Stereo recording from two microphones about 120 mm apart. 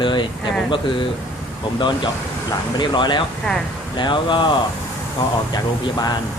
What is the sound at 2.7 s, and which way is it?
Speech, 40° left (ahead or behind).